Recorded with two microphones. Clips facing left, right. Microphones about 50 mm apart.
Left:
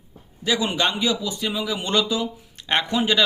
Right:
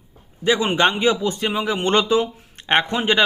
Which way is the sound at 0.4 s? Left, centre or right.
Right.